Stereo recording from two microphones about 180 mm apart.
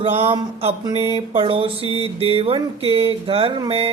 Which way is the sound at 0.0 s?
35° right (ahead or behind).